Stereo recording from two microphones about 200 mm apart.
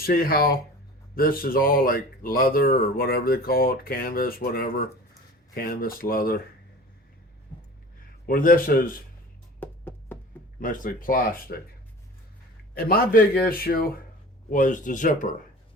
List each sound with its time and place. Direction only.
0.0 s speech: 45° left (ahead or behind)
8.3 s speech: 45° left (ahead or behind)
9.6 s music: 10° left (ahead or behind)
10.6 s speech: 40° left (ahead or behind)
12.7 s speech: 50° left (ahead or behind)